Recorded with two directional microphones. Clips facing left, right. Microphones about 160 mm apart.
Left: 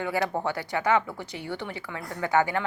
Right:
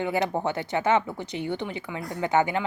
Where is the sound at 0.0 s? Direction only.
20° right (ahead or behind).